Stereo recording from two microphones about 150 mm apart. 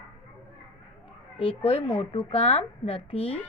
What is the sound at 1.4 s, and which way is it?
Speech, 35° left (ahead or behind).